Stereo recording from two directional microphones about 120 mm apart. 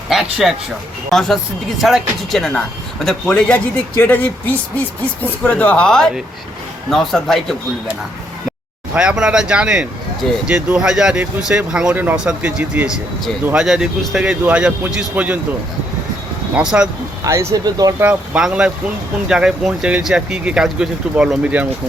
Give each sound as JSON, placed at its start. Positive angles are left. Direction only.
{"t": 0.1, "sound": "a man's voice", "side_deg": -5}
{"t": 9.0, "sound": "speech", "side_deg": -5}
{"t": 16.6, "sound": "speech", "side_deg": -10}
{"t": 17.2, "sound": "speech", "side_deg": -25}
{"t": 18.0, "sound": "speech", "side_deg": -10}